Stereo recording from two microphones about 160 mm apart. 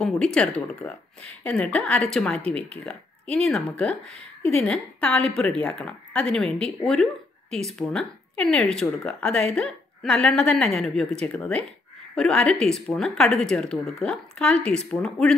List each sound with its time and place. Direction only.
0.0 s speech: 5° left (ahead or behind)